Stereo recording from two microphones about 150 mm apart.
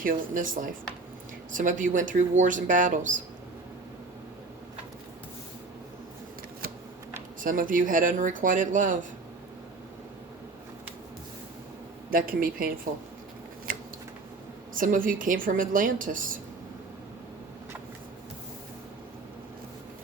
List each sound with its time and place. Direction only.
0.0 s a woman's voice: 65° right (ahead or behind)
7.4 s a woman's voice: 65° right (ahead or behind)
12.1 s speech: 70° right (ahead or behind)
14.8 s a woman's voice: 65° right (ahead or behind)